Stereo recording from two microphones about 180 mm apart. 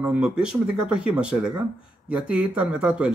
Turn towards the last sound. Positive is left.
turn(degrees=-5)  # may be behind; listen again after turning